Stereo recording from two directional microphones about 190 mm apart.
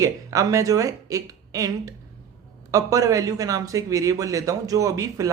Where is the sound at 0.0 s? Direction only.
15° right (ahead or behind).